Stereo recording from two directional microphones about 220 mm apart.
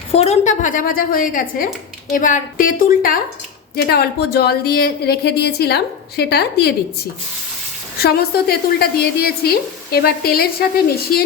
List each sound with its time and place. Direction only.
0.1 s a woman's voice: 30° left (ahead or behind); by 6.7 s 45° left (ahead or behind)
7.9 s a woman's voice: 45° left (ahead or behind)